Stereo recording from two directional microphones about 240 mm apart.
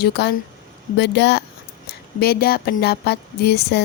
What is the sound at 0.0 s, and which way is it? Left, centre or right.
Speech, left.